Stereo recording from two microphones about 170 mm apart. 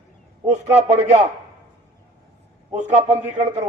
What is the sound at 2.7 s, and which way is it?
Speech, 40° right (ahead or behind).